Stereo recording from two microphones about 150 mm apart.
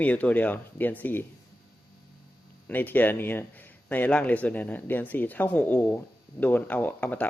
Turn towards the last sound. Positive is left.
turn(degrees=10)  # may be behind; listen again after turning